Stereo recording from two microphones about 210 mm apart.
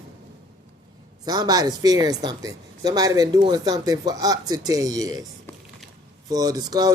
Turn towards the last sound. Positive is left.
turn(degrees=-20)  # may be behind; listen again after turning